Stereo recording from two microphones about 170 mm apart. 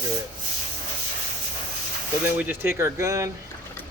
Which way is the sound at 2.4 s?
10° right (ahead or behind).